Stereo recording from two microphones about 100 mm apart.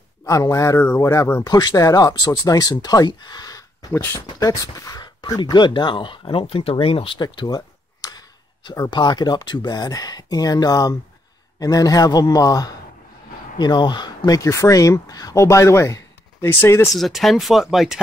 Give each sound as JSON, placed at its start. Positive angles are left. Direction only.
{"t": 0.2, "sound": "speech", "side_deg": 30}
{"t": 3.9, "sound": "speech", "side_deg": 25}
{"t": 4.4, "sound": "speech", "side_deg": 35}
{"t": 7.2, "sound": "speech", "side_deg": 45}
{"t": 15.4, "sound": "speech", "side_deg": 30}
{"t": 16.9, "sound": "speech", "side_deg": 0}